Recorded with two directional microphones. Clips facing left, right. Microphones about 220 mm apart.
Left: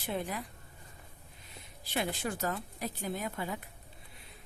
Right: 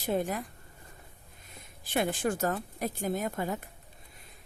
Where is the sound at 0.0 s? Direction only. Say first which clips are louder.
Right 6 dB; 45° right (ahead or behind).